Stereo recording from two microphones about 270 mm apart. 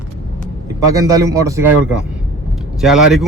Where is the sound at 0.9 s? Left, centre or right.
Centre.